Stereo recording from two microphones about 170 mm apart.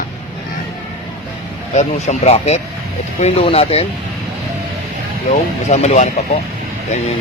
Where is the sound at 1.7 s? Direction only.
45° left (ahead or behind).